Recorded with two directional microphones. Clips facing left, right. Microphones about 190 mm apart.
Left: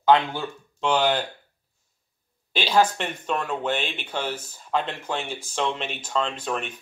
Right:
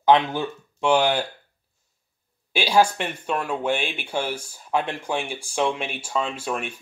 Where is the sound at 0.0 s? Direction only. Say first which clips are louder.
Right 1 dB; 15° right (ahead or behind).